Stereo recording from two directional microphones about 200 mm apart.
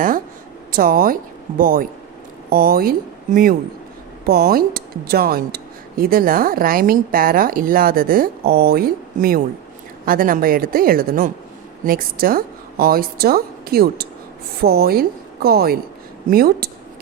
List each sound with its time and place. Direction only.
0.7 s a woman's voice: 45° right (ahead or behind)
4.3 s a woman's voice: 50° right (ahead or behind)